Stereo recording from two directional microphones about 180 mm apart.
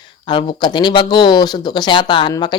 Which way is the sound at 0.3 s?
25° left (ahead or behind).